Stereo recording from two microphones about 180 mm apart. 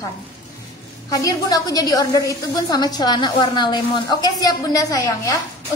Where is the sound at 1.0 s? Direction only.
20° left (ahead or behind).